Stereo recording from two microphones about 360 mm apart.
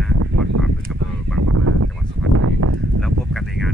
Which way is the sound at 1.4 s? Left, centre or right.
Right.